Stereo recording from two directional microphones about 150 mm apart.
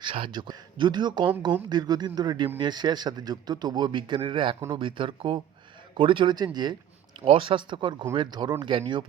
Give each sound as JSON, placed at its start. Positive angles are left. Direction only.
{"t": 0.0, "sound": "a man's voice", "side_deg": -35}